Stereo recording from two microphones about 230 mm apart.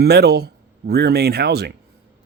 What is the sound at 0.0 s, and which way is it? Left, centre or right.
Speech, right.